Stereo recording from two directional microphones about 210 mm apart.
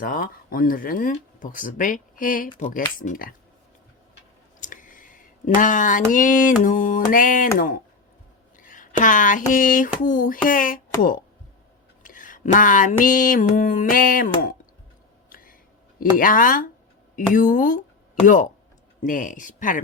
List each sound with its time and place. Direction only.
0.0 s speech: 45° left (ahead or behind)
4.6 s a sound: 40° left (ahead or behind)
6.6 s speech: 40° left (ahead or behind)
15.3 s a sound: 40° left (ahead or behind)
16.0 s speech: 40° left (ahead or behind)
19.0 s speech: 40° left (ahead or behind)